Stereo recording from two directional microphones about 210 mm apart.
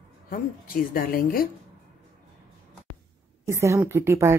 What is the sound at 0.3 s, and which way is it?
Speech, 45° left (ahead or behind).